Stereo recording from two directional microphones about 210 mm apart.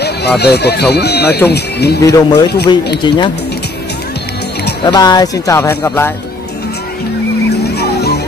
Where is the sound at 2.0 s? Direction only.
15° left (ahead or behind).